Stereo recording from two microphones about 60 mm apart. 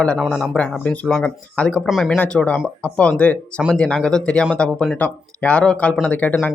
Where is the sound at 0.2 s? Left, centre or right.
Centre.